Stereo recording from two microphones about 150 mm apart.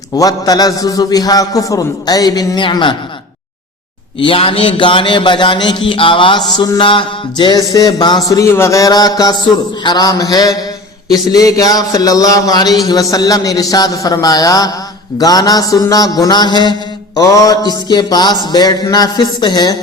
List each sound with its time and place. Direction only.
0.2 s speech: 25° left (ahead or behind)
4.2 s a man's voice: 40° left (ahead or behind)